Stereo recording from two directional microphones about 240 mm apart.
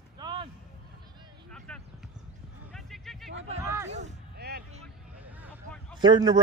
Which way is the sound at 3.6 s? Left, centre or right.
Centre.